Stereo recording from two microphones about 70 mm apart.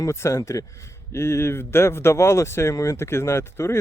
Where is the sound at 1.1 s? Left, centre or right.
Left.